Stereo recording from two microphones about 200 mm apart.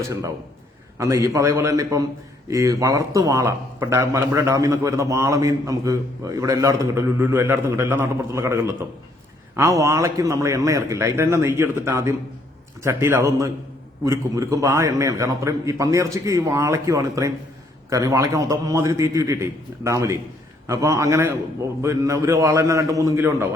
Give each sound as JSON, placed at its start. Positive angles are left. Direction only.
{"t": 0.9, "sound": "a man's voice", "side_deg": -15}